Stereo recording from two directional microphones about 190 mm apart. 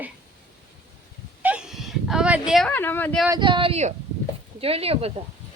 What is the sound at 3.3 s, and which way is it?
Speech, 25° right (ahead or behind).